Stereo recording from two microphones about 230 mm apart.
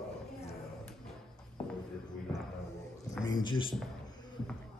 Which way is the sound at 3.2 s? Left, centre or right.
Centre.